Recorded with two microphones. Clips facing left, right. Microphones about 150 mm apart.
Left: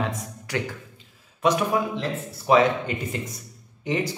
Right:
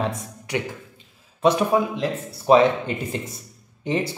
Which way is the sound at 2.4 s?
25° right (ahead or behind).